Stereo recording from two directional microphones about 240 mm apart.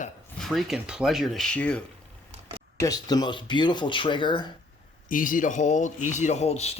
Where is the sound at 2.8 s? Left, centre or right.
Centre.